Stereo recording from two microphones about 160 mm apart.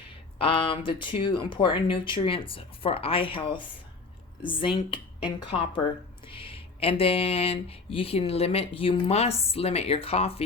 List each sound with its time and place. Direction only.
0.3 s speech: 35° left (ahead or behind)